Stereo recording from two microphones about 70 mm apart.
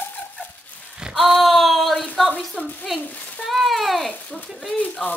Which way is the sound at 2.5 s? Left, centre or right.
Left.